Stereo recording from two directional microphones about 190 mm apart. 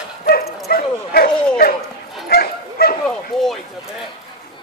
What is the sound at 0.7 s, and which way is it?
Bow-wow, 50° left (ahead or behind).